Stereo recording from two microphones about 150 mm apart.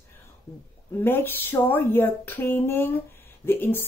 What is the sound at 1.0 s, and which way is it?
Speech, 15° left (ahead or behind).